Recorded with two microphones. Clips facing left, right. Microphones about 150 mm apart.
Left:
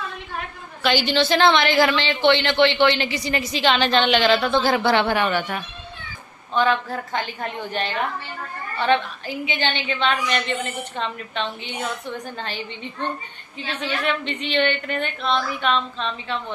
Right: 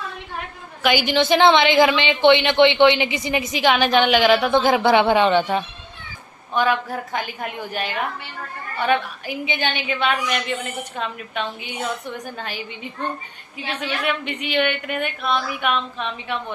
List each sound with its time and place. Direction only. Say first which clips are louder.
0.8 s a woman's voice: right 1 dB; 10° right (ahead or behind)
6.5 s speech: even; 10° right (ahead or behind)